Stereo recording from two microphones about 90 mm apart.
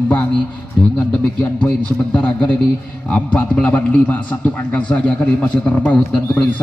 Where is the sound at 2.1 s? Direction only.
10° left (ahead or behind).